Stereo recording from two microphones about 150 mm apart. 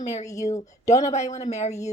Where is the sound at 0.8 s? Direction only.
50° left (ahead or behind).